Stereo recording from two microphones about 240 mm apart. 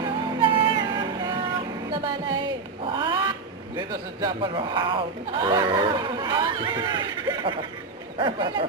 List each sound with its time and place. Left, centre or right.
0.0 s music: centre
2.8 s cat: centre
3.8 s a man's voice: centre